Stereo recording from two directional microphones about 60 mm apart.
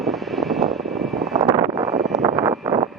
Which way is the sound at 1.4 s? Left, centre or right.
Right.